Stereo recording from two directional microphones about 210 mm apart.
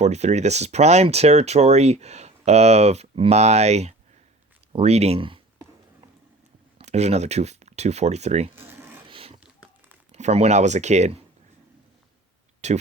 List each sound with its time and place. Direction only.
0.0 s speech: 30° right (ahead or behind)
6.7 s speech: 30° right (ahead or behind)
8.5 s zipper: 10° right (ahead or behind)
9.0 s a sound: 25° right (ahead or behind)
10.1 s speech: 30° right (ahead or behind)
12.6 s speech: 30° right (ahead or behind)